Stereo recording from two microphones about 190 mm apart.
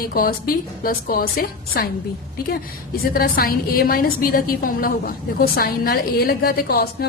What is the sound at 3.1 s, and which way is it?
A woman's voice, 55° left (ahead or behind).